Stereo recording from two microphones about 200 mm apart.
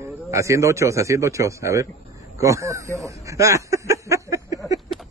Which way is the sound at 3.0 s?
15° right (ahead or behind).